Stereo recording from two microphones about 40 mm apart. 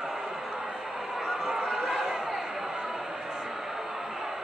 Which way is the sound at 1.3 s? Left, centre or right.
Centre.